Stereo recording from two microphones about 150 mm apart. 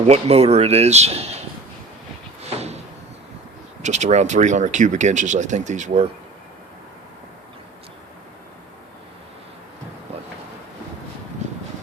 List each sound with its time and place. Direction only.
0.0 s speech: 45° right (ahead or behind)
2.6 s door: 45° right (ahead or behind)
3.8 s speech: 50° right (ahead or behind)
11.4 s vehicle: 50° right (ahead or behind)